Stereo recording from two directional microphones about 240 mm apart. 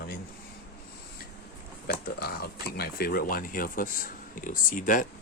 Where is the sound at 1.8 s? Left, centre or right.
Left.